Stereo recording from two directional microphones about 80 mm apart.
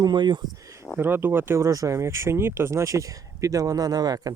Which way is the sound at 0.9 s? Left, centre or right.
Right.